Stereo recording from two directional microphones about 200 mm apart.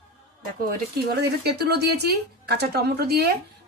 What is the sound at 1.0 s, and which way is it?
A woman's voice, 55° right (ahead or behind).